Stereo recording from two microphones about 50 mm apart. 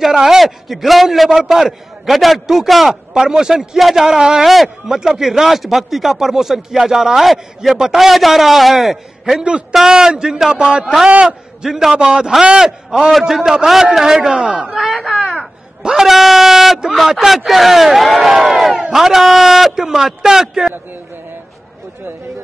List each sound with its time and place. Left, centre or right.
0.0 s a man's voice: centre
14.3 s speech: centre
14.7 s speech: centre
15.8 s speech: centre
16.1 s dog: centre
16.9 s a man's voice: centre